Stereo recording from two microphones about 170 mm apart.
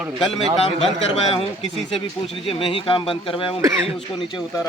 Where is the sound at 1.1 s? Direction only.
35° left (ahead or behind).